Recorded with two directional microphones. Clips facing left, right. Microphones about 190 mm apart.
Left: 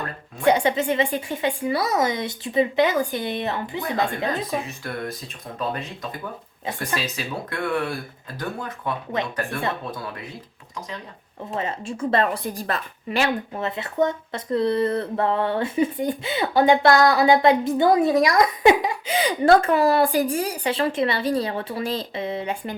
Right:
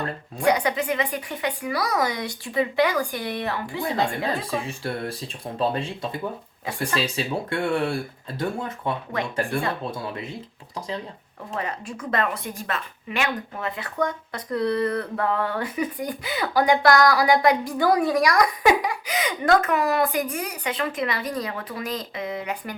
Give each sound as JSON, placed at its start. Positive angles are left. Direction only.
{"t": 0.3, "sound": "a woman's voice", "side_deg": 25}
{"t": 3.8, "sound": "speech", "side_deg": -30}
{"t": 11.5, "sound": "a woman's voice", "side_deg": 25}